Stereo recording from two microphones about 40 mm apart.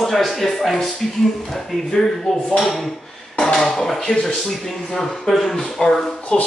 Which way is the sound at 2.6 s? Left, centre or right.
Centre.